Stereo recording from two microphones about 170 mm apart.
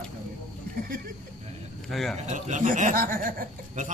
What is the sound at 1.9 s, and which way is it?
Speech, centre (ahead or behind).